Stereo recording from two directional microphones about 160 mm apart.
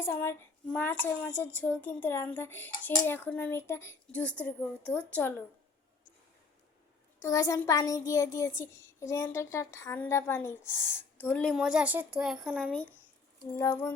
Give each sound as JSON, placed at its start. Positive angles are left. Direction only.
{"t": 0.0, "sound": "a child's voice", "side_deg": 15}
{"t": 7.2, "sound": "a child's voice", "side_deg": 20}
{"t": 11.5, "sound": "speech", "side_deg": -5}
{"t": 13.6, "sound": "a child's voice", "side_deg": 20}